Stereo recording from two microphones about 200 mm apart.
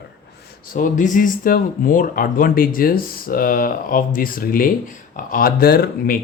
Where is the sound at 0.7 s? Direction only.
40° left (ahead or behind).